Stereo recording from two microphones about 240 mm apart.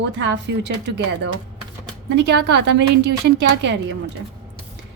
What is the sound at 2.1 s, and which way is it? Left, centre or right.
Speech, right.